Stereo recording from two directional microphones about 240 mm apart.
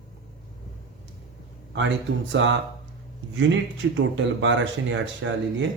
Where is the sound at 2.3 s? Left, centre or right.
Right.